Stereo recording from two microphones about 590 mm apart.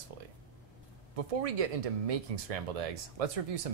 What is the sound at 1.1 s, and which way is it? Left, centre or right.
Speech, right.